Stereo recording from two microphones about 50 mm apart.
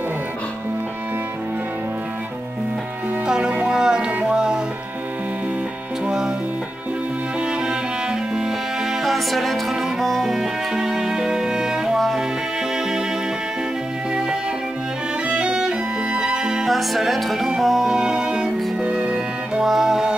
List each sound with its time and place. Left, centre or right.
3.3 s speech: centre
3.6 s music: centre
6.0 s music: centre
7.6 s music: centre
9.0 s music: centre
15.2 s music: centre
16.6 s music: centre; by 19.6 s right
19.6 s music: centre